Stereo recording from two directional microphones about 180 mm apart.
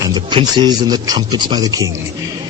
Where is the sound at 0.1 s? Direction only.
25° right (ahead or behind).